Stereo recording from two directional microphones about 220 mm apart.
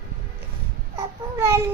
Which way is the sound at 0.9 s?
10° right (ahead or behind).